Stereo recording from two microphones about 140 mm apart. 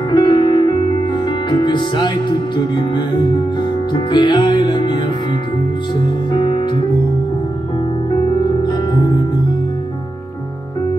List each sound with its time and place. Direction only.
0.1 s music: 35° left (ahead or behind)
6.3 s music: 35° left (ahead or behind)
8.1 s music: 35° left (ahead or behind)